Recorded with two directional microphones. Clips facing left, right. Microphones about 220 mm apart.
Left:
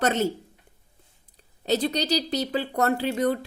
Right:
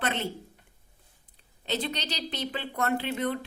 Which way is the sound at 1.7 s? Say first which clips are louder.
Left 8 dB; 40° left (ahead or behind).